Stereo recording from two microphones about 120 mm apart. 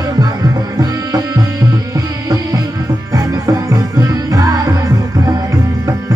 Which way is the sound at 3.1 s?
25° right (ahead or behind).